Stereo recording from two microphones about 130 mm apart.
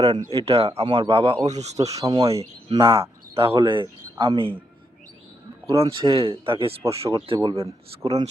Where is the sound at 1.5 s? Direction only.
60° right (ahead or behind).